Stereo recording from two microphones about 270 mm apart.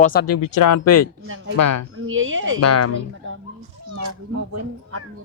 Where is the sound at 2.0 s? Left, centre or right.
Right.